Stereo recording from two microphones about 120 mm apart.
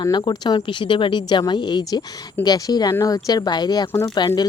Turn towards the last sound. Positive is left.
turn(degrees=35)  # may be behind; listen again after turning